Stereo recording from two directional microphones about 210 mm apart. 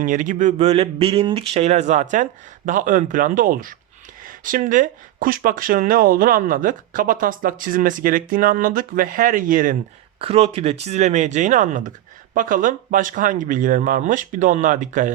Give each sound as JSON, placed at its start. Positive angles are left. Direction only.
{"t": 0.0, "sound": "speech", "side_deg": -40}
{"t": 10.2, "sound": "speech", "side_deg": -30}